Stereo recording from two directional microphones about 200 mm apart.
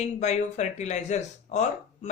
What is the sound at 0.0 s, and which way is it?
Speech, 35° left (ahead or behind).